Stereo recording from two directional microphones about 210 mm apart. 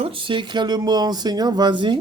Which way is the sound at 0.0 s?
25° right (ahead or behind).